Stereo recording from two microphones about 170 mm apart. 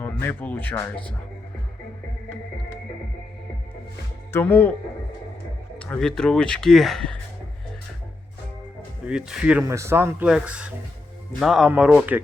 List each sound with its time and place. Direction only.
0.0 s speech: 10° left (ahead or behind)
4.3 s speech: 15° left (ahead or behind)
5.8 s speech: 5° left (ahead or behind)
9.0 s speech: 5° right (ahead or behind)
9.6 s speech: 15° right (ahead or behind)